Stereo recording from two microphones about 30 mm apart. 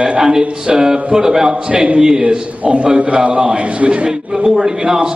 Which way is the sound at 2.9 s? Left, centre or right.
Right.